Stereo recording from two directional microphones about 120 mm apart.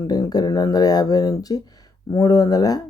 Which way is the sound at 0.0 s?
30° left (ahead or behind).